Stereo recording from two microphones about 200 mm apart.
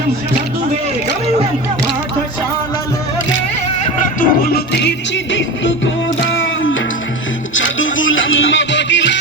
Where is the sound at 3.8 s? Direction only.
45° left (ahead or behind).